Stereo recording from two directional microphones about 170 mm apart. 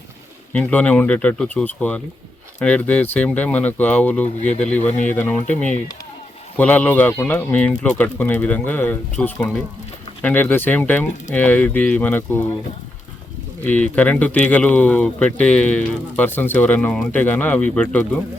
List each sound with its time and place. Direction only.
0.5 s speech: 10° left (ahead or behind)
4.8 s speech: 45° left (ahead or behind)
5.1 s speech: 10° left (ahead or behind)
6.6 s speech: 10° left (ahead or behind)
13.7 s speech: 10° left (ahead or behind)